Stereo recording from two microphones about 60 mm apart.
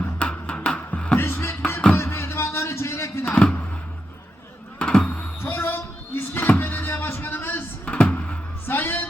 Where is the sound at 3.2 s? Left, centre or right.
Left.